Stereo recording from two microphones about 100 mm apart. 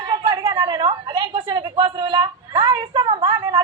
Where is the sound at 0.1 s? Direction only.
55° right (ahead or behind).